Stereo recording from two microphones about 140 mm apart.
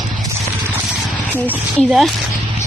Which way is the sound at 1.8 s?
5° right (ahead or behind).